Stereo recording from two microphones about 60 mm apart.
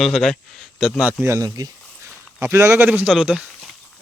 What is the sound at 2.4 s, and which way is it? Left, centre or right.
Speech, right.